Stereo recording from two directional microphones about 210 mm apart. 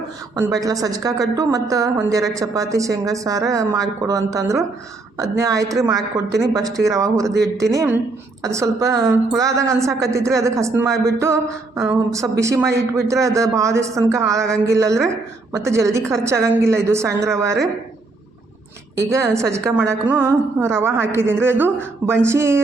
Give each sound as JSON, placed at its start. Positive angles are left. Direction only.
{"t": 0.3, "sound": "a woman's voice", "side_deg": -15}
{"t": 18.9, "sound": "a woman's voice", "side_deg": -15}